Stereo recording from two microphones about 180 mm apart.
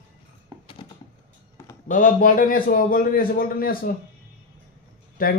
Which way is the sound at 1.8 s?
45° left (ahead or behind).